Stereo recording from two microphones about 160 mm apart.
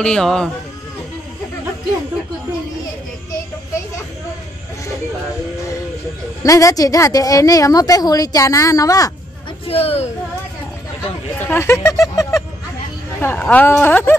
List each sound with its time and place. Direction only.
0.0 s speech: 5° left (ahead or behind)
6.4 s a woman's voice: 20° left (ahead or behind)
9.7 s speech: 40° left (ahead or behind)
11.3 s speech: 15° left (ahead or behind)